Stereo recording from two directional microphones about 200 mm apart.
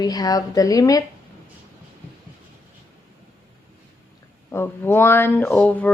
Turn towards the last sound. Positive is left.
turn(degrees=5)  # may be behind; listen again after turning